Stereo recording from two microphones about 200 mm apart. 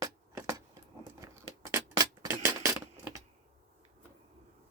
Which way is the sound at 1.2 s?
15° right (ahead or behind).